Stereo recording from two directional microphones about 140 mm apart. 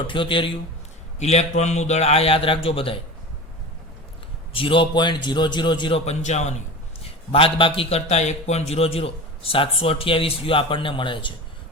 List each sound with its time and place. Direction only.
0.1 s a man's voice: 35° left (ahead or behind)
1.2 s a man's voice: 50° left (ahead or behind)
4.5 s a man's voice: 40° left (ahead or behind)
6.1 s a man's voice: 55° left (ahead or behind)
7.0 s a man's voice: 40° left (ahead or behind)